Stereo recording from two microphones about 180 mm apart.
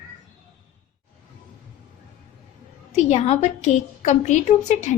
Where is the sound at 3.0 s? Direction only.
40° left (ahead or behind).